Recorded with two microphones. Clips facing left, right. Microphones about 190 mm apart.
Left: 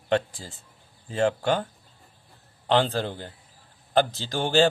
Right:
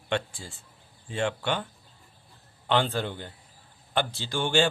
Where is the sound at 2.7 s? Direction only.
40° left (ahead or behind).